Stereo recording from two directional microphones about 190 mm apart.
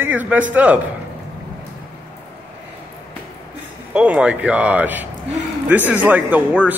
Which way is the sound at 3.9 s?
5° right (ahead or behind).